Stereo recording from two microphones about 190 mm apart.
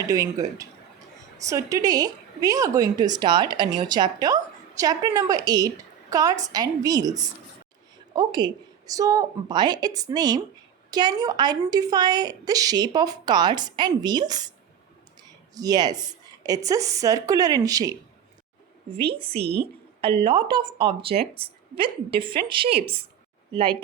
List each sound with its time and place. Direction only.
0.0 s speech: 15° right (ahead or behind)
15.5 s speech: 20° right (ahead or behind)
19.4 s speech: 60° right (ahead or behind)
20.0 s speech: 25° right (ahead or behind)